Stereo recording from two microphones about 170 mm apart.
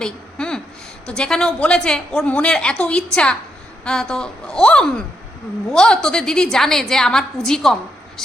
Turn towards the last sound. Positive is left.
turn(degrees=5)  # may be behind; listen again after turning